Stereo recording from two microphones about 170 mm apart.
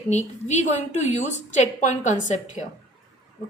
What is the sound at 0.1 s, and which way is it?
Speech, 45° left (ahead or behind).